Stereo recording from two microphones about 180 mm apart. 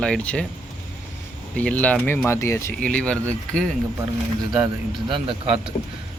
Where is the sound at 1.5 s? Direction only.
10° left (ahead or behind).